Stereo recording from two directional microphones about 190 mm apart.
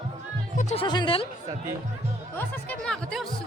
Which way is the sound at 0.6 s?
40° left (ahead or behind).